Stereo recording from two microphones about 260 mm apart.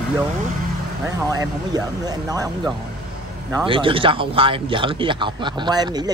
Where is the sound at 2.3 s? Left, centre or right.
Centre.